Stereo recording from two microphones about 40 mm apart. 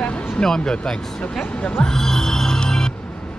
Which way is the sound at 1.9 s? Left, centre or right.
Centre.